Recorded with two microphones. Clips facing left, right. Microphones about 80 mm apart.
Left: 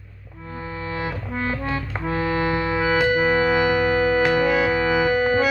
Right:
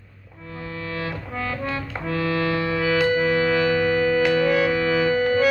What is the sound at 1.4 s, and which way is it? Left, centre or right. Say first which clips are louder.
Music: left 2 dB; left.